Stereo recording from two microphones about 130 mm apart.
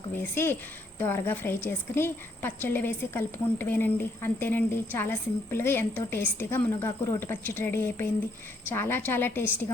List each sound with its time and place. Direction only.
0.2 s a woman's voice: 15° left (ahead or behind)